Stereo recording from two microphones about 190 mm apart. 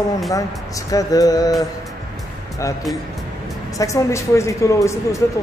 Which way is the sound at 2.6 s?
15° left (ahead or behind).